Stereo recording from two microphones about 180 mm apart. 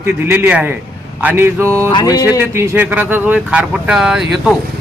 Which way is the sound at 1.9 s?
20° left (ahead or behind).